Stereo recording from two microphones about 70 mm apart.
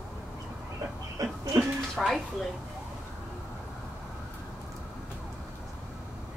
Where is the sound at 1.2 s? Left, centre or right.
Right.